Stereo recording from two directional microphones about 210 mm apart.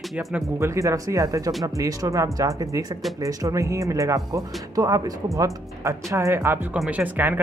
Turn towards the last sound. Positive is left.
turn(degrees=-10)  # may be behind; listen again after turning